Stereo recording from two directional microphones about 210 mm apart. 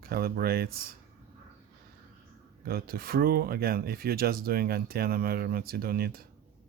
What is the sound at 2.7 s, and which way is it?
Speech, 45° right (ahead or behind).